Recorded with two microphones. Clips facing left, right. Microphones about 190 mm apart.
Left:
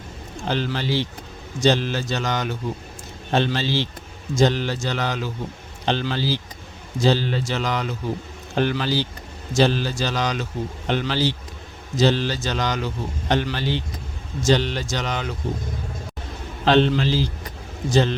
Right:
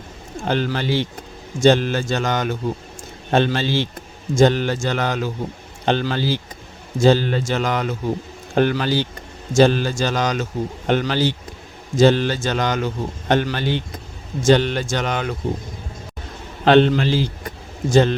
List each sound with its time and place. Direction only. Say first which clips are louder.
0.4 s a man's voice: right 3 dB; 50° right (ahead or behind)
16.6 s a man's voice: right 4 dB; 55° right (ahead or behind)